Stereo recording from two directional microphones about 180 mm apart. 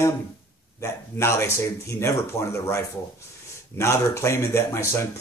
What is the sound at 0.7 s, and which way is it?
A man's voice, 15° left (ahead or behind).